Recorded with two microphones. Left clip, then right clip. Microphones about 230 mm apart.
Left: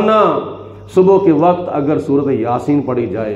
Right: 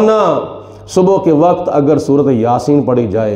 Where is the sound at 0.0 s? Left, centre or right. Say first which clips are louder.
Right 1 dB; right.